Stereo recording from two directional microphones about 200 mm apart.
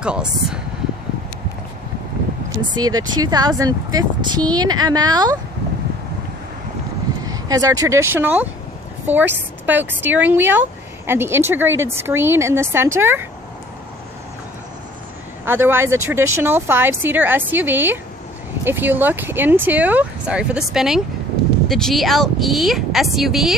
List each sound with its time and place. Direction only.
0.0 s speech: 5° right (ahead or behind)
2.7 s speech: 20° right (ahead or behind)
7.2 s speech: 20° right (ahead or behind)
15.4 s speech: 10° right (ahead or behind)